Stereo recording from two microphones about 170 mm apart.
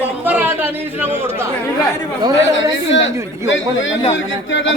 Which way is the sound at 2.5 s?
90° left.